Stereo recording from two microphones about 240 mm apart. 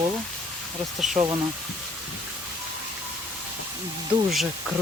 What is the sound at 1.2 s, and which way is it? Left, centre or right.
Speech, right.